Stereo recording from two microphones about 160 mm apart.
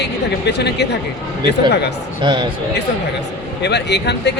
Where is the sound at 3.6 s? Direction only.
90° left.